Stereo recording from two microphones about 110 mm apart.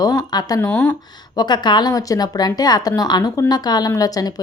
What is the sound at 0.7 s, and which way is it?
Speech, 10° left (ahead or behind).